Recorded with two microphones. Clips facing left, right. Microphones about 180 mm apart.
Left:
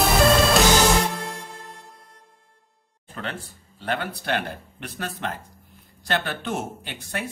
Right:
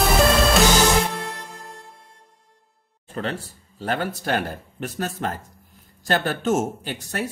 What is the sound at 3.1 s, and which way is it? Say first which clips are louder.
Speech: right 5 dB; 40° right (ahead or behind).